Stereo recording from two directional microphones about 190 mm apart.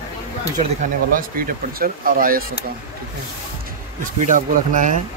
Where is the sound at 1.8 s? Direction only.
50° right (ahead or behind).